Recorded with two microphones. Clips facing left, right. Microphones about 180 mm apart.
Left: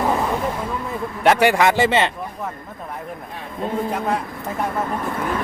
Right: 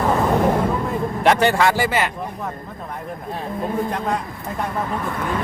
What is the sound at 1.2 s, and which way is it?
Speech, 5° left (ahead or behind).